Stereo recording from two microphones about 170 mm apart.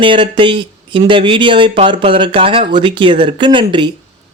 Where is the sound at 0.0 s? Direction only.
30° right (ahead or behind).